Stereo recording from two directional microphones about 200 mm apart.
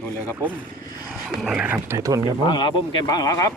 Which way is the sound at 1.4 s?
Centre (ahead or behind).